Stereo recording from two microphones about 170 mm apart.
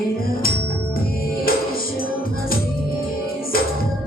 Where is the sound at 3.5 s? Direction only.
60° left (ahead or behind).